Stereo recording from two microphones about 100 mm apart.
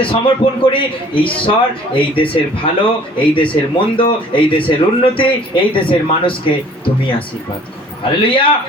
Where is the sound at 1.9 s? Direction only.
60° left (ahead or behind).